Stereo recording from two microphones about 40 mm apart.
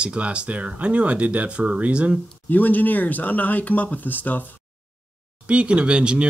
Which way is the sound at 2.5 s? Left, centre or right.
Left.